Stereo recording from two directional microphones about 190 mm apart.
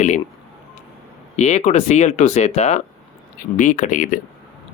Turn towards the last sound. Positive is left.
turn(degrees=45)  # may be behind; listen again after turning